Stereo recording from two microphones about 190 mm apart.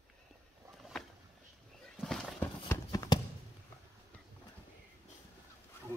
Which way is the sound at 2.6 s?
20° left (ahead or behind).